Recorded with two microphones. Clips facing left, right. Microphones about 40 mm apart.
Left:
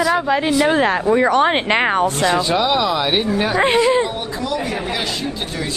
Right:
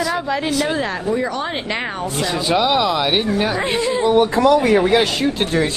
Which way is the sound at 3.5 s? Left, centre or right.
Left.